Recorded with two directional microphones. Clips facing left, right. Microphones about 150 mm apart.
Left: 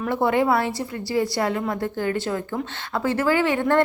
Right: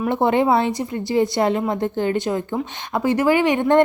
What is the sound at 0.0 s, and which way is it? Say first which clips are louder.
A woman's voice: right 3 dB; 20° right (ahead or behind).